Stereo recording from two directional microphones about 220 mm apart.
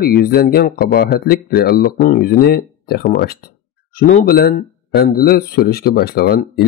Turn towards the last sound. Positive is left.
turn(degrees=45)  # may be behind; listen again after turning